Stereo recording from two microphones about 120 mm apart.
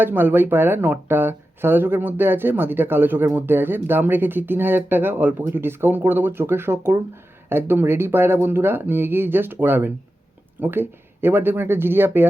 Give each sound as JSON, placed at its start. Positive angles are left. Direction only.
{"t": 0.0, "sound": "speech", "side_deg": -15}